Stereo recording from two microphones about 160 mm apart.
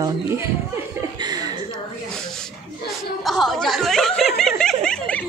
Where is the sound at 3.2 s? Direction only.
Centre (ahead or behind).